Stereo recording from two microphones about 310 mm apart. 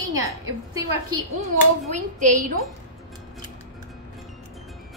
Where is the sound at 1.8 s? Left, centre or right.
Right.